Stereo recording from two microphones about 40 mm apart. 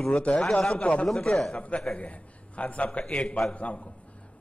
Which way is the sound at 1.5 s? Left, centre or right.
Left.